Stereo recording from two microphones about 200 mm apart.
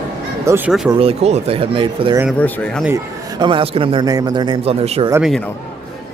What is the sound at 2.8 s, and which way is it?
A man's voice, 15° right (ahead or behind).